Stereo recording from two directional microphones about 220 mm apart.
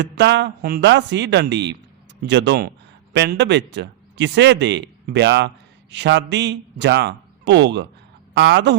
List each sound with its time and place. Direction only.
0.0 s speech: 50° right (ahead or behind)